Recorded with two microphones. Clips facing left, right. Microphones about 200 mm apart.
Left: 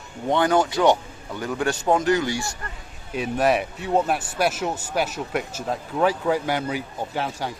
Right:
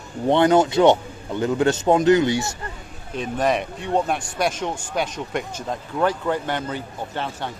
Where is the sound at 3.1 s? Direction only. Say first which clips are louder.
Left 1 dB; 10° left (ahead or behind).